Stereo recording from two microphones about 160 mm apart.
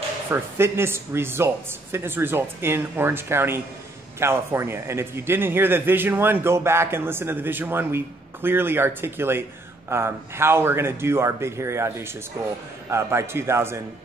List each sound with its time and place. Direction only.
0.3 s a man's voice: 15° right (ahead or behind)